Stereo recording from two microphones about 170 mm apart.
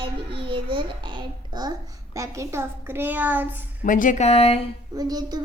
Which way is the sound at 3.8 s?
50° left (ahead or behind).